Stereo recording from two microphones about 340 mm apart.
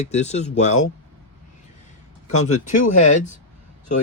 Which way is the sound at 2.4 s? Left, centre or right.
Left.